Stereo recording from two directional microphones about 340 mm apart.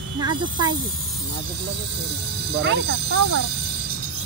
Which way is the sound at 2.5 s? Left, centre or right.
Right.